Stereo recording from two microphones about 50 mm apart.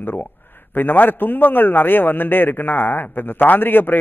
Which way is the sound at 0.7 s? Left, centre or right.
Left.